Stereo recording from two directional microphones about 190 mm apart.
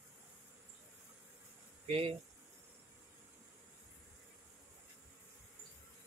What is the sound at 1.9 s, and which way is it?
Speech, 30° right (ahead or behind).